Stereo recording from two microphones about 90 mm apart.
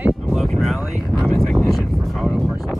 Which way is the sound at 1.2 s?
5° left (ahead or behind).